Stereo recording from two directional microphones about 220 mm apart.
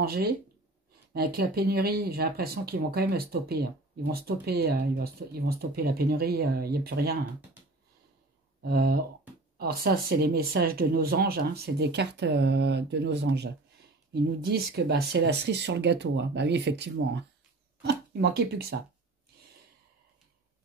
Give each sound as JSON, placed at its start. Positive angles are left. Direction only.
{"t": 0.0, "sound": "speech", "side_deg": -45}
{"t": 7.6, "sound": "a sound", "side_deg": -5}
{"t": 8.6, "sound": "speech", "side_deg": -45}